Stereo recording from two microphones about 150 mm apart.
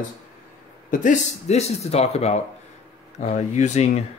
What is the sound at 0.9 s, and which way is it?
Speech, 50° left (ahead or behind).